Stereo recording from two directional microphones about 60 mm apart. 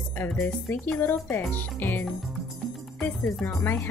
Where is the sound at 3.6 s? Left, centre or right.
Left.